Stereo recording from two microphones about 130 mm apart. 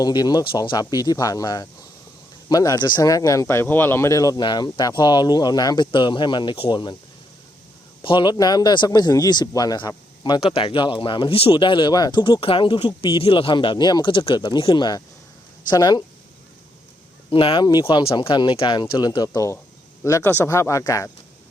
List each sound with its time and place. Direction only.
0.0 s speech: 30° left (ahead or behind)
8.0 s speech: 40° left (ahead or behind)
10.4 s speech: 45° left (ahead or behind)
17.3 s speech: 40° left (ahead or behind); by 21.1 s 25° left (ahead or behind)